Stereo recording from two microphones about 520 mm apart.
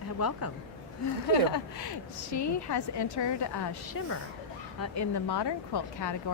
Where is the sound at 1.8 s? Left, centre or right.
Left.